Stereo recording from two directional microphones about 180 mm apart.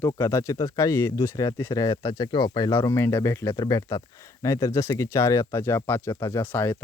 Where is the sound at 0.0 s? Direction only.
15° left (ahead or behind).